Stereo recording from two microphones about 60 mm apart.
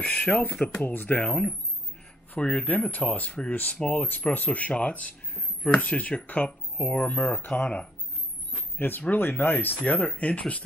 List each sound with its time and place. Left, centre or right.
0.0 s speech: left
1.2 s speech: centre
2.3 s speech: left
4.0 s speech: left
9.8 s speech: left